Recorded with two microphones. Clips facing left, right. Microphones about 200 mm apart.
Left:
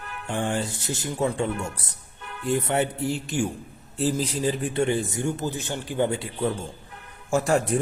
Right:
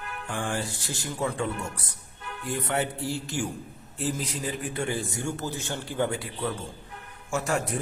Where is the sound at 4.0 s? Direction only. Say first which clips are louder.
Left 6 dB; 30° left (ahead or behind).